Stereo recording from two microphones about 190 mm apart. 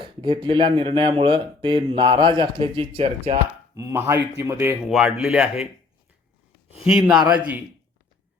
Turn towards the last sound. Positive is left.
turn(degrees=-5)  # may be behind; listen again after turning